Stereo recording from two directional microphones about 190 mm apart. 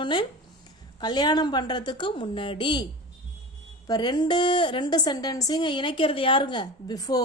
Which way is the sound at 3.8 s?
20° left (ahead or behind).